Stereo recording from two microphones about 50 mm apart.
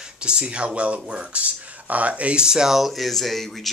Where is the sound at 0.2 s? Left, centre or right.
Centre.